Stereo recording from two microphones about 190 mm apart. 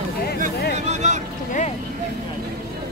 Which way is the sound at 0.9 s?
35° right (ahead or behind).